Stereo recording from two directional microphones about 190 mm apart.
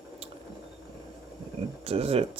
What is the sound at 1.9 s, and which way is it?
Speech, 30° right (ahead or behind).